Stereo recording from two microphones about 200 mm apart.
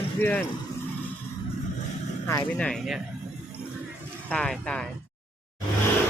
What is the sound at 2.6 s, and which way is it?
Speech, centre (ahead or behind).